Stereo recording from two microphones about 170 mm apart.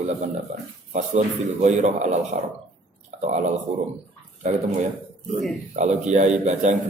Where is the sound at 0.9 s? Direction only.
40° right (ahead or behind).